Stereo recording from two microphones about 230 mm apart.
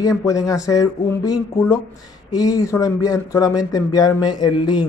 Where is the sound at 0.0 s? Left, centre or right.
Centre.